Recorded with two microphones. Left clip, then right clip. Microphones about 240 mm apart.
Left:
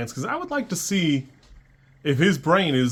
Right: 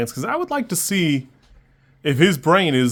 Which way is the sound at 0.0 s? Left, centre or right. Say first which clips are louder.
Right 5 dB; right.